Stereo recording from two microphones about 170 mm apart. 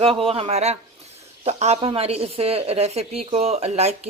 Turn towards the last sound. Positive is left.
turn(degrees=-40)  # may be behind; listen again after turning